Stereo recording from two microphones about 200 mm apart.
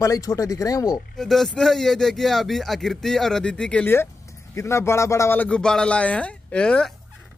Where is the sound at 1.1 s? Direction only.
Centre (ahead or behind).